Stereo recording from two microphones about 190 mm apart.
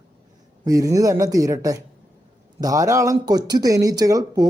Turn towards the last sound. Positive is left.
turn(degrees=-20)  # may be behind; listen again after turning